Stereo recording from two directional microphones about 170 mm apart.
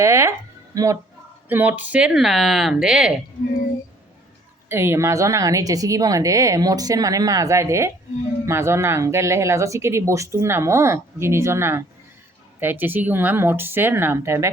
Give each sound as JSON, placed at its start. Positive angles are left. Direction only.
{"t": 0.0, "sound": "speech", "side_deg": -15}
{"t": 4.7, "sound": "a woman's voice", "side_deg": -15}